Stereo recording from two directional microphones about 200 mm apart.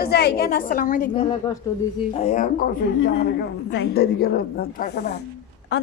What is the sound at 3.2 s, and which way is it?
A woman's voice, 60° left (ahead or behind).